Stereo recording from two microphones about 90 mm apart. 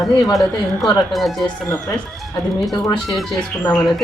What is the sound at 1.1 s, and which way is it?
Speech, centre (ahead or behind).